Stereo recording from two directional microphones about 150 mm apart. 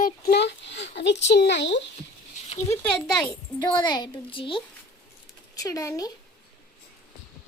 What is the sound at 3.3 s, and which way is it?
A child's voice, 30° left (ahead or behind).